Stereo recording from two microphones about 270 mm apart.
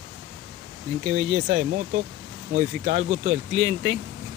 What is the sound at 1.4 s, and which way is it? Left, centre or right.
Speech, right.